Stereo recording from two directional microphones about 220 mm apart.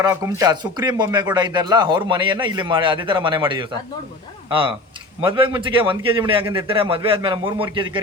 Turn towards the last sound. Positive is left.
turn(degrees=-20)  # may be behind; listen again after turning